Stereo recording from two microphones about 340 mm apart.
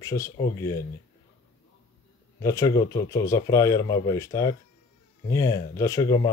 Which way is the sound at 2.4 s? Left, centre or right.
Centre.